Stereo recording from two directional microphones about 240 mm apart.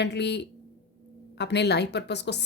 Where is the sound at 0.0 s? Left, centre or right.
Left.